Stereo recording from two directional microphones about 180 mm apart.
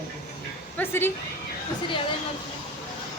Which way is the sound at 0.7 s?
10° left (ahead or behind).